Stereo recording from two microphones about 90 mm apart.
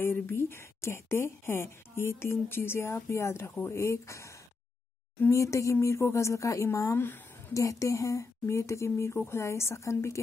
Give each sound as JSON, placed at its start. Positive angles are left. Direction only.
{"t": 0.0, "sound": "a woman's voice", "side_deg": 25}
{"t": 5.3, "sound": "speech", "side_deg": 35}